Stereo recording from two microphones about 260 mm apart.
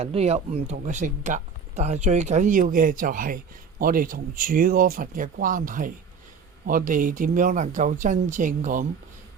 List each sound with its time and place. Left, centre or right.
0.0 s speech: right